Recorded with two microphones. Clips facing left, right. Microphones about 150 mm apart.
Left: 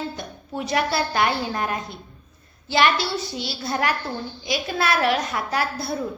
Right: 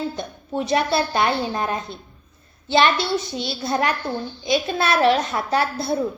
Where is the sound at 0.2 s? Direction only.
25° right (ahead or behind).